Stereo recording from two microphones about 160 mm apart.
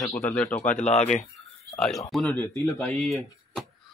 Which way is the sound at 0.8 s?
45° left (ahead or behind).